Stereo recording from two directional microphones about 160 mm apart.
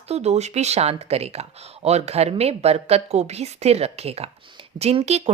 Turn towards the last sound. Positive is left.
turn(degrees=-40)  # may be behind; listen again after turning